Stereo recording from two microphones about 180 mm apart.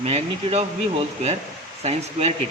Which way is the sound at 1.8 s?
35° right (ahead or behind).